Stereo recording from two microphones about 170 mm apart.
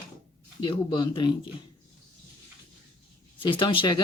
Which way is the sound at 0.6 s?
25° left (ahead or behind).